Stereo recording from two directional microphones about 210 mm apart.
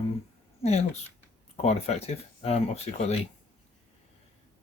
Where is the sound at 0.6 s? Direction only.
30° left (ahead or behind).